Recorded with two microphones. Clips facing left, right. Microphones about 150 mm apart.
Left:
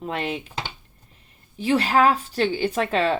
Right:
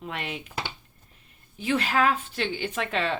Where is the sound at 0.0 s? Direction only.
35° left (ahead or behind).